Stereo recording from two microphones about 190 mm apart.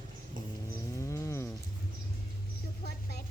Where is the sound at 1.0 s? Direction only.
15° left (ahead or behind).